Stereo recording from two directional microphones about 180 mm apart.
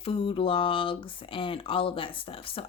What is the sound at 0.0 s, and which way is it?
Speech, 30° left (ahead or behind).